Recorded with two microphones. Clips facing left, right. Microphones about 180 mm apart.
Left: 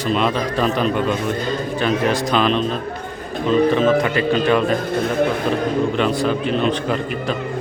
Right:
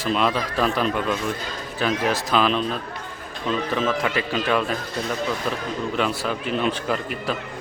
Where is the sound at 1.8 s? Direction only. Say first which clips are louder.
Left 3 dB; 5° right (ahead or behind).